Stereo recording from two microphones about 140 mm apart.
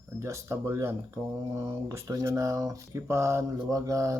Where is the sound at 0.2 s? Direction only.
20° right (ahead or behind).